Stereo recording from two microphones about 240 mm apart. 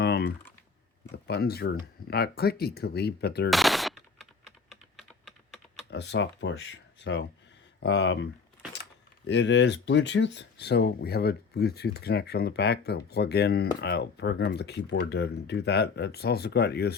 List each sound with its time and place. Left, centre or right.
0.0 s typing: left
1.1 s speech: left
3.5 s typing: centre
5.9 s speech: left